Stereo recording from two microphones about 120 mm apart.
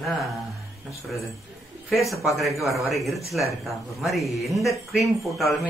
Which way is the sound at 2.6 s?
Centre (ahead or behind).